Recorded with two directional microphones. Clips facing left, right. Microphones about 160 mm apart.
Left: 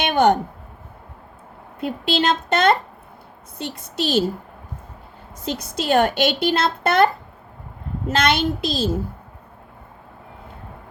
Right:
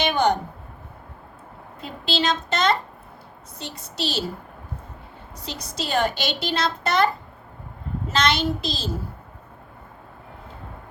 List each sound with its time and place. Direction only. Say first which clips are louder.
0.0 s a sound: left 4 dB; 55° left (ahead or behind)
1.8 s a child's voice: left 5 dB; 55° left (ahead or behind)
5.5 s a child's voice: left 7 dB; 55° left (ahead or behind)
8.1 s a child's voice: left 3 dB; 55° left (ahead or behind)